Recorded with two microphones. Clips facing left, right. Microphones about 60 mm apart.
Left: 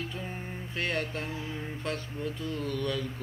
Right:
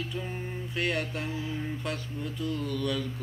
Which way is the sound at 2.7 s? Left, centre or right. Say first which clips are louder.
Left 1 dB; left.